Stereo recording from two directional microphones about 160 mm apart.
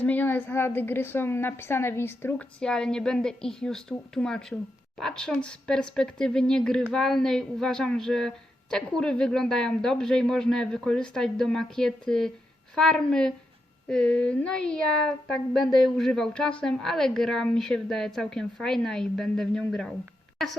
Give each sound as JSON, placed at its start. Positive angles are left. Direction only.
{"t": 0.0, "sound": "a woman's voice", "side_deg": 10}